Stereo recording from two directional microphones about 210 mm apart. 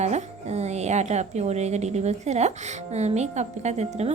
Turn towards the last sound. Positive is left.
turn(degrees=-30)  # may be behind; listen again after turning